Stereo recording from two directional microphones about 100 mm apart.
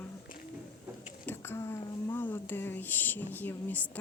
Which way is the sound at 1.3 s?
25° left (ahead or behind).